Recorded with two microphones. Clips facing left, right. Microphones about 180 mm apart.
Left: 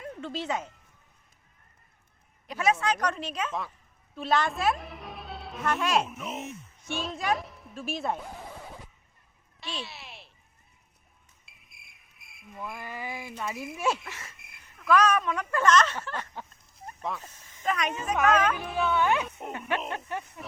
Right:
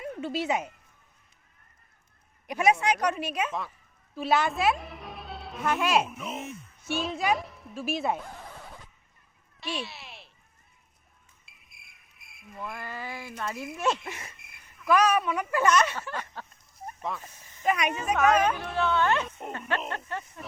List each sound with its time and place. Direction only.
0.0 s speech: 10° right (ahead or behind)
2.5 s a woman's voice: 15° right (ahead or behind)
9.6 s speech: centre (ahead or behind)
11.4 s cricket: centre (ahead or behind)
12.8 s speech: 15° left (ahead or behind)
14.1 s speech: 15° right (ahead or behind)
17.0 s speech: centre (ahead or behind)
17.6 s speech: 10° right (ahead or behind)
18.5 s speech: centre (ahead or behind)